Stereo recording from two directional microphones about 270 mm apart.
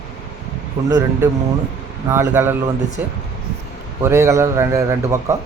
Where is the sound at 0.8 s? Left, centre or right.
Centre.